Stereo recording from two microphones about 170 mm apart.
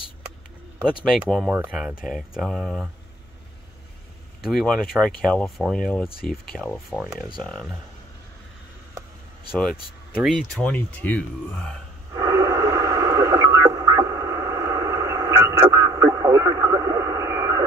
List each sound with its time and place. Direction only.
1.1 s speech: centre (ahead or behind)
1.5 s speech: 10° right (ahead or behind)
4.4 s speech: centre (ahead or behind)
10.2 s speech: 5° left (ahead or behind)
12.1 s radio: 20° right (ahead or behind)